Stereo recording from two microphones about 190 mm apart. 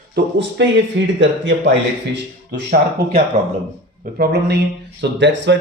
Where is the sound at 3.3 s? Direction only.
30° right (ahead or behind).